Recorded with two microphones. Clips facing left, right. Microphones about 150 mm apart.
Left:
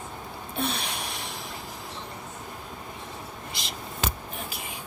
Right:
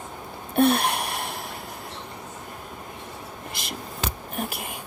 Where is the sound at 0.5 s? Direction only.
60° right (ahead or behind).